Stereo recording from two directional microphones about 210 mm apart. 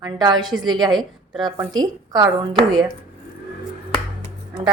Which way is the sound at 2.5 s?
Centre (ahead or behind).